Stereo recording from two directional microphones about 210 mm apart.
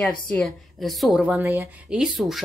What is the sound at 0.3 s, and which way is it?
Speech, centre (ahead or behind).